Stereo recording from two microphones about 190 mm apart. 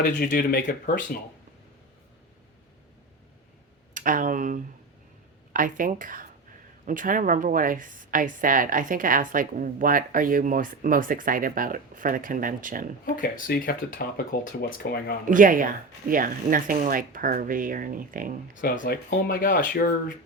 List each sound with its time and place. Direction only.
0.0 s speech: 45° left (ahead or behind)
3.9 s a woman's voice: 45° right (ahead or behind)
13.1 s speech: 50° left (ahead or behind)
15.3 s a woman's voice: 45° right (ahead or behind)
18.6 s speech: 45° left (ahead or behind)